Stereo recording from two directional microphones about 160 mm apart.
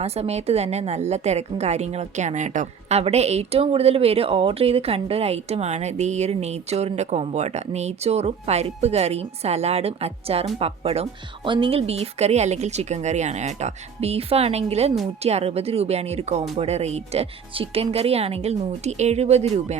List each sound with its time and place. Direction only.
0.0 s a woman's voice: 40° right (ahead or behind)